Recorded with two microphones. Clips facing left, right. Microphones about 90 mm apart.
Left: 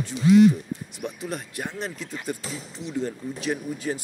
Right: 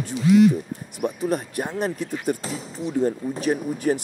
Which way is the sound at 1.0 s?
45° right (ahead or behind).